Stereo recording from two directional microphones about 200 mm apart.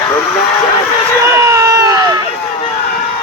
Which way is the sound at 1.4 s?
15° right (ahead or behind).